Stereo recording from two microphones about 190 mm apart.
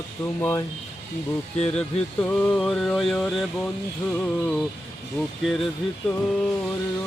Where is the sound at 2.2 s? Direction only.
10° left (ahead or behind).